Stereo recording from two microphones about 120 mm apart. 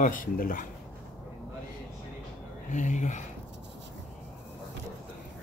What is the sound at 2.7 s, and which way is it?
Speech, 90° left.